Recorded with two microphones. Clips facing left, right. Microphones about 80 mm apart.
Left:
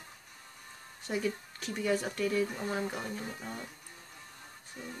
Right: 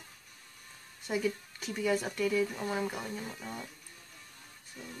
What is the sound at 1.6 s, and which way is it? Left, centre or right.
Speech, centre.